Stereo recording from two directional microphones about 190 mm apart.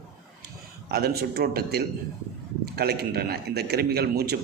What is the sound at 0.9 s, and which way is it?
A man's voice, 55° right (ahead or behind).